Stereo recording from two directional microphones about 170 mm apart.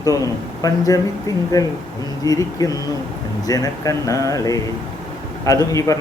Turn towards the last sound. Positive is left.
turn(degrees=20)  # may be behind; listen again after turning